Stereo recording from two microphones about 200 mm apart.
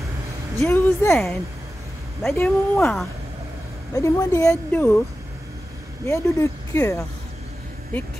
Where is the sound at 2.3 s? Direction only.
10° left (ahead or behind).